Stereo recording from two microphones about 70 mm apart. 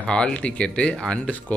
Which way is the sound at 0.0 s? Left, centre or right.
Centre.